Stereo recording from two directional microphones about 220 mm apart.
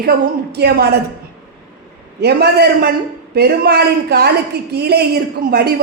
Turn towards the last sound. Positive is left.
turn(degrees=-45)  # may be behind; listen again after turning